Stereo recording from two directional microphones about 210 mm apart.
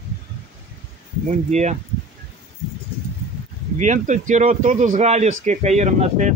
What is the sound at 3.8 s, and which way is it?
A man's voice, 35° right (ahead or behind).